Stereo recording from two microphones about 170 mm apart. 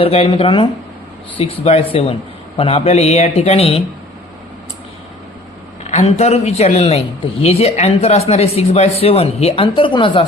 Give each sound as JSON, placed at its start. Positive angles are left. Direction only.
{"t": 0.0, "sound": "a man's voice", "side_deg": 35}
{"t": 5.8, "sound": "a man's voice", "side_deg": 40}